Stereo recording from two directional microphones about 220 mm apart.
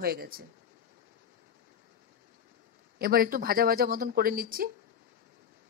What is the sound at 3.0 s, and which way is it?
Speech, 40° right (ahead or behind).